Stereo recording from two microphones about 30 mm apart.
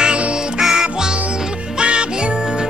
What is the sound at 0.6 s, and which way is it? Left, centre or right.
Music, centre.